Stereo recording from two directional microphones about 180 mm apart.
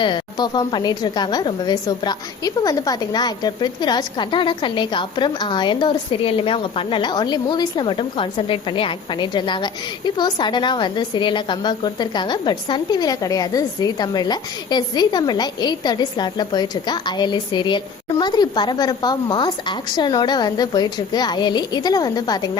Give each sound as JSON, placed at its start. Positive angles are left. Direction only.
{"t": 0.0, "sound": "a woman's voice", "side_deg": 25}